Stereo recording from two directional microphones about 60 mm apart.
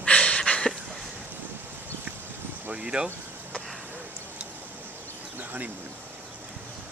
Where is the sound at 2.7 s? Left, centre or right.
Centre.